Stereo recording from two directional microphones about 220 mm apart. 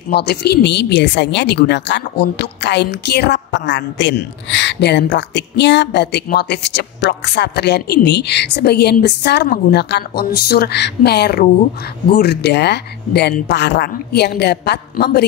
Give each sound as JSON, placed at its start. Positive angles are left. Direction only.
{"t": 0.1, "sound": "speech", "side_deg": 50}